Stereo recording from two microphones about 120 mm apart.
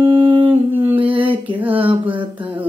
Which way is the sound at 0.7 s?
15° right (ahead or behind).